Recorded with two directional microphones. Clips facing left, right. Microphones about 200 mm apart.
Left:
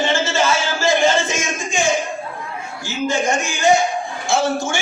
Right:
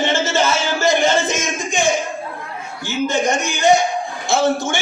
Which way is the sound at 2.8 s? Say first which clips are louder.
Right 2 dB; 20° right (ahead or behind).